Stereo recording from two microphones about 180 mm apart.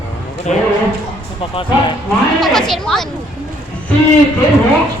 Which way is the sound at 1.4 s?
30° left (ahead or behind).